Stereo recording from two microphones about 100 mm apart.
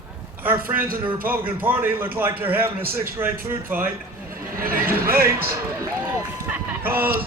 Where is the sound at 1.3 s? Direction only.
20° right (ahead or behind).